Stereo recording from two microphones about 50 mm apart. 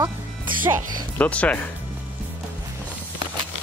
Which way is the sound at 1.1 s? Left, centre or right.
Left.